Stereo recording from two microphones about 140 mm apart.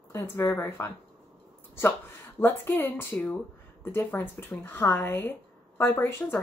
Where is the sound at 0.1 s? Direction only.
15° left (ahead or behind).